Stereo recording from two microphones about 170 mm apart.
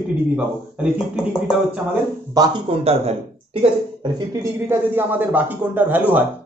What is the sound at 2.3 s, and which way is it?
Speech, 20° right (ahead or behind).